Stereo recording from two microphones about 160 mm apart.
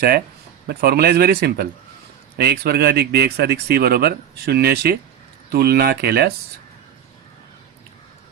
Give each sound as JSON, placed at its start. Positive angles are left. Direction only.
{"t": 0.7, "sound": "speech", "side_deg": -75}